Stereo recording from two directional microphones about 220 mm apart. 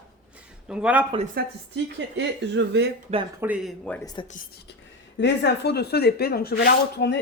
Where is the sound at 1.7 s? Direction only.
55° right (ahead or behind).